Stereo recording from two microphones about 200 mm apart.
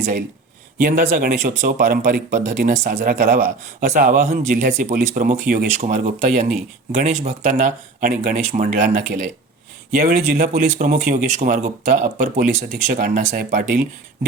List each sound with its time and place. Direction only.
0.0 s speech: 40° right (ahead or behind)